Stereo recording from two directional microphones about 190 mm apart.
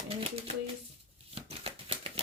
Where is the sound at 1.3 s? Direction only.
30° right (ahead or behind).